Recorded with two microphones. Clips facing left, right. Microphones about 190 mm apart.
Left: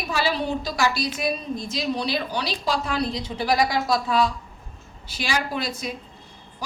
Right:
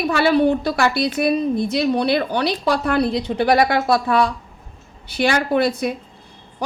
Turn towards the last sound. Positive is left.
turn(degrees=-60)  # may be behind; listen again after turning